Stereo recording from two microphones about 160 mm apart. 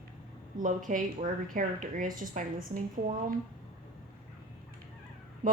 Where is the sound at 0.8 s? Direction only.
55° right (ahead or behind).